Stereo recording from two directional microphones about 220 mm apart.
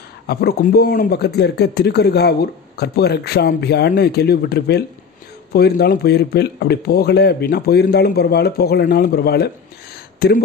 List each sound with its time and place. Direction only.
0.3 s a man's voice: 45° left (ahead or behind)